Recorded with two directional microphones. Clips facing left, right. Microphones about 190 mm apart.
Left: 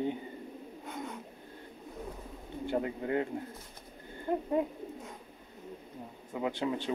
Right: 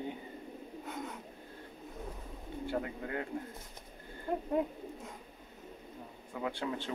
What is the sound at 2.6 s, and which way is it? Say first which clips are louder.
Speech: left 5 dB; 25° left (ahead or behind).